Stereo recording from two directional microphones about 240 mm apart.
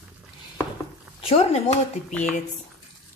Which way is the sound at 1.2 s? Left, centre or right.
Left.